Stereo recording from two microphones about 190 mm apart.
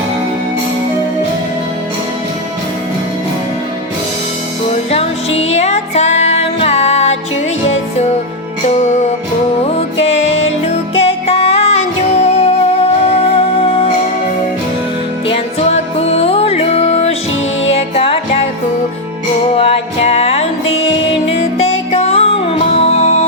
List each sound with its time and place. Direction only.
4.9 s music: 35° left (ahead or behind)
8.8 s music: 40° left (ahead or behind)
15.3 s music: 30° left (ahead or behind)
19.5 s music: 30° left (ahead or behind)